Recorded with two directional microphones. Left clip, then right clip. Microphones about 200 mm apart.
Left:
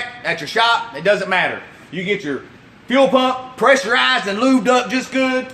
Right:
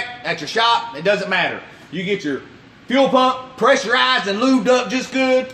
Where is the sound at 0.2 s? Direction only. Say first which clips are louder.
Left 2 dB; 15° left (ahead or behind).